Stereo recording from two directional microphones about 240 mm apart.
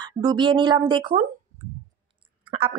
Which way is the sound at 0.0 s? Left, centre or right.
Centre.